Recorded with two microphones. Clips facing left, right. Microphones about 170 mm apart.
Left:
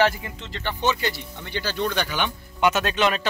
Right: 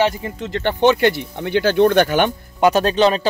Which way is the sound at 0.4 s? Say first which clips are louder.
Right 12 dB; 60° right (ahead or behind).